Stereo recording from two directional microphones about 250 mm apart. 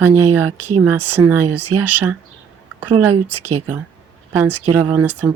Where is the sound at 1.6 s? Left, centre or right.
Right.